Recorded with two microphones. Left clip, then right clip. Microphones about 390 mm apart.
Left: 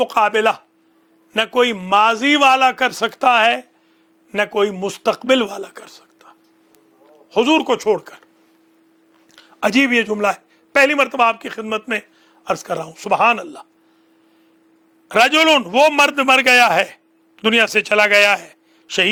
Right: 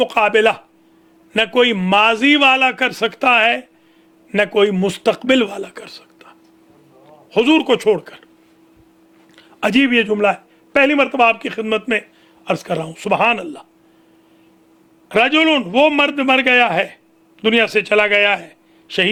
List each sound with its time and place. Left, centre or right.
0.0 s a man's voice: left
9.3 s a man's voice: left
15.1 s a man's voice: left